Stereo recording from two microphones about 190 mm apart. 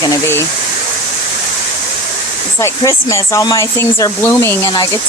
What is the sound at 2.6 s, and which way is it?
Speech, 15° left (ahead or behind).